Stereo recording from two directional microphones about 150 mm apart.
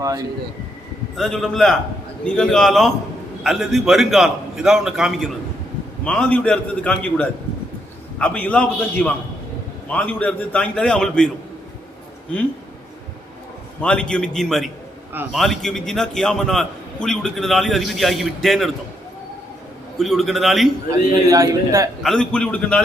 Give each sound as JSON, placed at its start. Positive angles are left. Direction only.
{"t": 1.1, "sound": "a man's voice", "side_deg": 0}
{"t": 13.8, "sound": "a man's voice", "side_deg": 5}
{"t": 20.0, "sound": "a man's voice", "side_deg": 0}
{"t": 20.9, "sound": "a man's voice", "side_deg": -20}
{"t": 22.0, "sound": "a man's voice", "side_deg": 5}